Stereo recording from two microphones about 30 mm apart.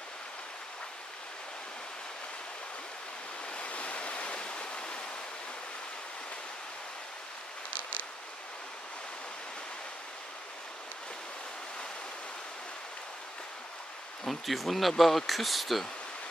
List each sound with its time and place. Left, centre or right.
3.5 s waves: left
7.7 s a sound: right
14.2 s speech: centre